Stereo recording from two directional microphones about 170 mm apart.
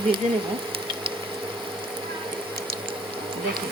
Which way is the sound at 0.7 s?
30° right (ahead or behind).